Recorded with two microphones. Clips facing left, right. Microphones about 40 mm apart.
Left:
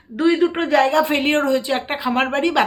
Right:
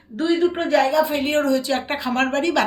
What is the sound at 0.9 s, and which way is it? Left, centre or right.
Speech, left.